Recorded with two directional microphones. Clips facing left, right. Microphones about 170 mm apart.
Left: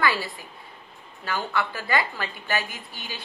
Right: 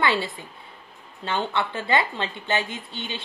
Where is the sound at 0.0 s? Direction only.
25° right (ahead or behind).